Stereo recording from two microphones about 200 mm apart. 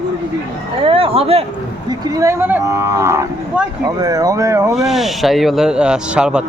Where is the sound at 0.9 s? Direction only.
25° right (ahead or behind).